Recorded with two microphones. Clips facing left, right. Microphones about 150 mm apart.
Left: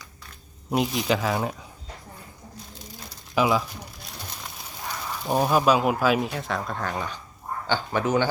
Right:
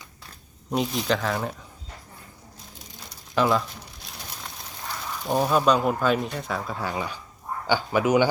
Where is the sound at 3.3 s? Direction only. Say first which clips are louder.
Even; 5° left (ahead or behind).